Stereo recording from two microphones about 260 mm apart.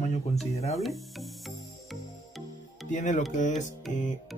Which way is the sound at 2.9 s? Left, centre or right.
Left.